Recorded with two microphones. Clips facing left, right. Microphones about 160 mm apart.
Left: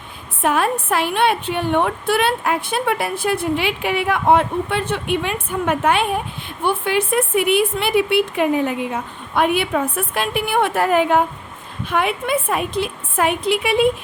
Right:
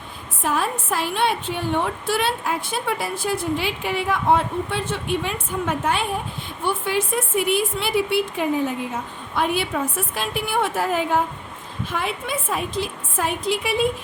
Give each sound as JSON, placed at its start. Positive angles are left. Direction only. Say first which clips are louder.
{"t": 0.4, "sound": "a woman's voice", "louder": "left 5 dB", "side_deg": 65}